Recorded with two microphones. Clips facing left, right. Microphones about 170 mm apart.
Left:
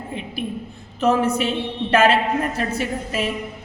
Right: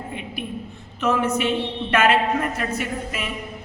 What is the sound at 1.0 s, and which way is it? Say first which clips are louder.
A woman's voice: left 2 dB; 35° left (ahead or behind).